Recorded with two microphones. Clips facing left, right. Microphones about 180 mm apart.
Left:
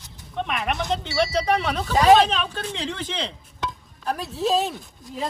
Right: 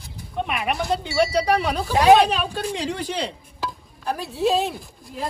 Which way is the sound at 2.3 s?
10° right (ahead or behind).